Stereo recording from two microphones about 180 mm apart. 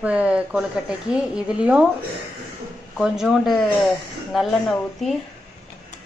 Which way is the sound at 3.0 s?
Centre (ahead or behind).